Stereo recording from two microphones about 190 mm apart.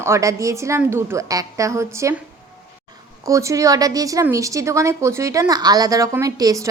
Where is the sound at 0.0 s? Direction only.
15° right (ahead or behind).